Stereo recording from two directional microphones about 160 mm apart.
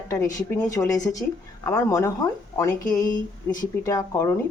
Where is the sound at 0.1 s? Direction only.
20° left (ahead or behind).